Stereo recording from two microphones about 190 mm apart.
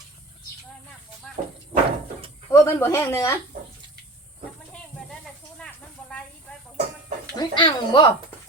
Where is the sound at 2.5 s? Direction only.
15° left (ahead or behind).